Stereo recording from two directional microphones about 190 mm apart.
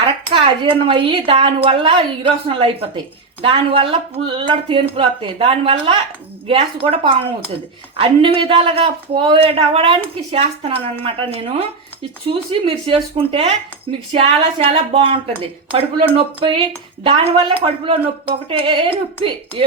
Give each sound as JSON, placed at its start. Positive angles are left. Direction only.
{"t": 0.0, "sound": "a woman's voice", "side_deg": -25}